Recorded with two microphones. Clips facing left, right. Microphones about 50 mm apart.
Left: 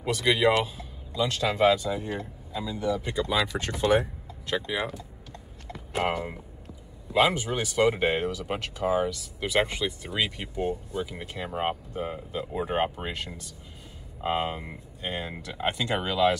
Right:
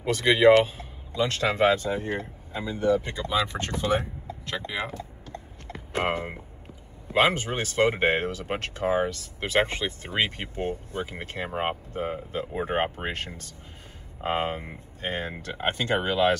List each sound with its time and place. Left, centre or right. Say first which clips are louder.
0.0 s speech: right 4 dB; right
3.9 s a sound: left 4 dB; right
4.6 s typing: left 2 dB; right
7.1 s speech: right 1 dB; right
13.1 s speech: right 2 dB; right